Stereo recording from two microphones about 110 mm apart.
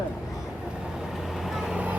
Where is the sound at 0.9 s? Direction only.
5° right (ahead or behind).